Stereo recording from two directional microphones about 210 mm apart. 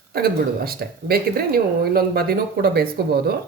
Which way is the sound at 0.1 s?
45° right (ahead or behind).